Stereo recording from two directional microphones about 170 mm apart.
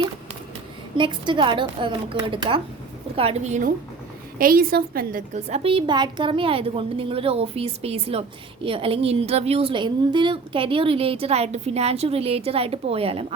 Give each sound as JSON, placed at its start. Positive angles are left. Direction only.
{"t": 0.9, "sound": "a woman's voice", "side_deg": -30}
{"t": 4.4, "sound": "a woman's voice", "side_deg": -55}
{"t": 5.3, "sound": "a woman's voice", "side_deg": -40}